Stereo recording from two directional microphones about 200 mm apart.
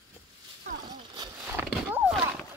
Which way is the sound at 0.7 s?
35° right (ahead or behind).